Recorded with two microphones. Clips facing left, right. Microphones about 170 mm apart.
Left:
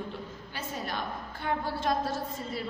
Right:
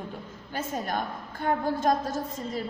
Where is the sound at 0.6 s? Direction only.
45° right (ahead or behind).